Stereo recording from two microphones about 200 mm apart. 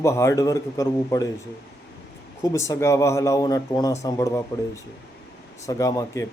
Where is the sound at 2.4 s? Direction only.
15° left (ahead or behind).